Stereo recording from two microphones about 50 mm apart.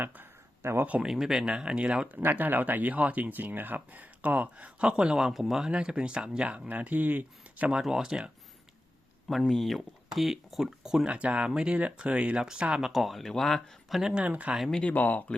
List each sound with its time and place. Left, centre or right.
0.6 s speech: right
1.0 s speech: centre
1.5 s speech: centre
2.1 s speech: right; by 5.7 s centre
5.7 s speech: centre
6.7 s speech: right
7.8 s speech: centre
9.5 s speech: centre
11.0 s speech: right
12.9 s speech: centre
14.0 s speech: centre
14.3 s speech: right
14.8 s speech: left